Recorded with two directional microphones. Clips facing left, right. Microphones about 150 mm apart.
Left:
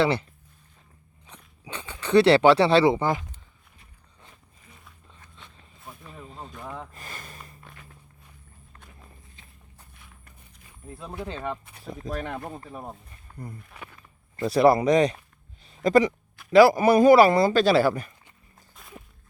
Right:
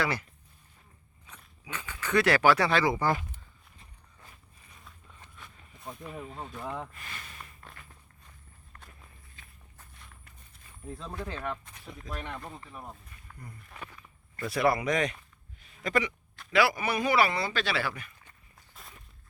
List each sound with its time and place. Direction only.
0.0 s speech: 30° left (ahead or behind)
1.3 s speech: 30° left (ahead or behind)
6.0 s a sound: 5° right (ahead or behind)
6.5 s speech: centre (ahead or behind)
6.9 s a sound: 40° left (ahead or behind)
10.9 s speech: 15° left (ahead or behind)
11.3 s speech: 25° left (ahead or behind)
11.7 s speech: 40° left (ahead or behind)
13.3 s a sound: 30° left (ahead or behind)
13.7 s speech: 10° left (ahead or behind)
14.4 s speech: 35° left (ahead or behind)
15.6 s a sound: 35° left (ahead or behind)
16.5 s speech: 40° left (ahead or behind)
18.7 s walk: centre (ahead or behind)